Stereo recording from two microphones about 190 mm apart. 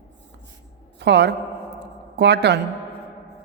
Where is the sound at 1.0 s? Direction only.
65° right (ahead or behind).